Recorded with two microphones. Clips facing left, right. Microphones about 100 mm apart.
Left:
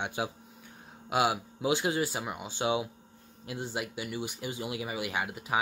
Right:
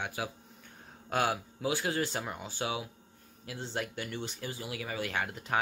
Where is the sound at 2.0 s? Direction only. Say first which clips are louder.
Left 2 dB; 10° left (ahead or behind).